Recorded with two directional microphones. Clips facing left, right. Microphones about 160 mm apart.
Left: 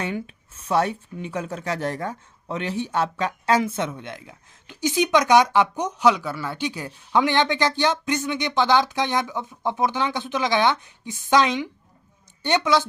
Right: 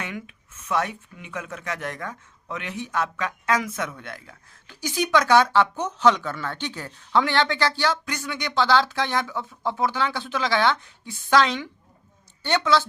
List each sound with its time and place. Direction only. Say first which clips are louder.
0.0 s a woman's voice: left 6 dB; 30° left (ahead or behind); by 12.9 s 15° left (ahead or behind)